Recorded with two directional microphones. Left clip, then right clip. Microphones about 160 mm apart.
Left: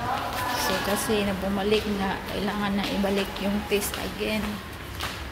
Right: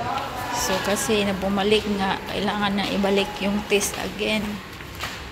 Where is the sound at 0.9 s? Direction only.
Centre (ahead or behind).